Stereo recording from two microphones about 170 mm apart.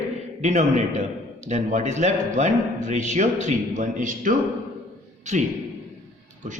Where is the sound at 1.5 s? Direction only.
45° right (ahead or behind).